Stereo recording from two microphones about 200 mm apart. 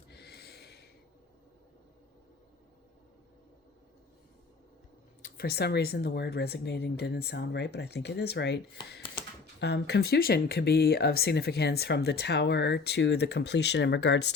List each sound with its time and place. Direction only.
0.1 s snort: 55° left (ahead or behind)
5.2 s speech: 50° left (ahead or behind)